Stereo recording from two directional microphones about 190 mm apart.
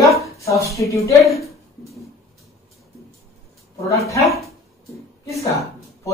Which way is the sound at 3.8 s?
15° left (ahead or behind).